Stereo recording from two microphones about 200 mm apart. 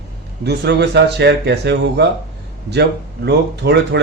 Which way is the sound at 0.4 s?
55° right (ahead or behind).